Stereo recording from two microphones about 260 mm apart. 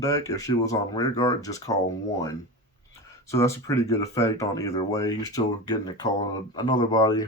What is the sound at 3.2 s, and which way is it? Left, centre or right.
Speech, centre.